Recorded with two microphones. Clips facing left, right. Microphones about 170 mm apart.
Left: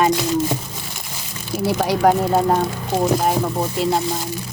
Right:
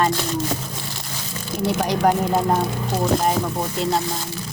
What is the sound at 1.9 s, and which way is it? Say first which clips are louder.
Speech: left 4 dB; centre (ahead or behind).